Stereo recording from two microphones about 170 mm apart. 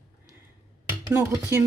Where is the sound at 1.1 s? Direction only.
15° right (ahead or behind).